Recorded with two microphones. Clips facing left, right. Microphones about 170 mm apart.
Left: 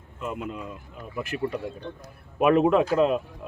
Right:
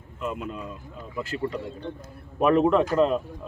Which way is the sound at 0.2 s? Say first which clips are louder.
Right 1 dB; 20° left (ahead or behind).